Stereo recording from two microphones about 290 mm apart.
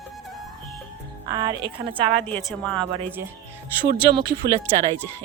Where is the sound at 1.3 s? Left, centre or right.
Centre.